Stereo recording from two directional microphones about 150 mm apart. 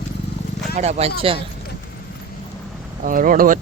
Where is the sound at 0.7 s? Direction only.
50° right (ahead or behind).